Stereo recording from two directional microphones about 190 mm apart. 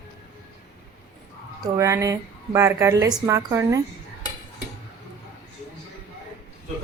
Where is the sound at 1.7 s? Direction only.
15° right (ahead or behind).